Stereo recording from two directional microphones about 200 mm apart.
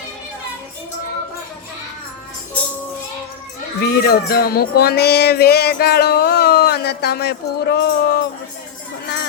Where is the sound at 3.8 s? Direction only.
50° left (ahead or behind).